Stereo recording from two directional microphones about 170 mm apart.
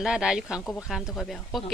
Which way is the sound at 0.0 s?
5° right (ahead or behind).